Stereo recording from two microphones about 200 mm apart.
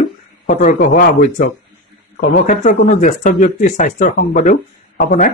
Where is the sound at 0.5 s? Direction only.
40° left (ahead or behind).